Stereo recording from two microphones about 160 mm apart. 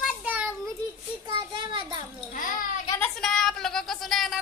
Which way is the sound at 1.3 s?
30° right (ahead or behind).